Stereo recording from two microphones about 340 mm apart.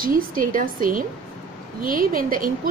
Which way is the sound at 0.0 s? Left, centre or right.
Right.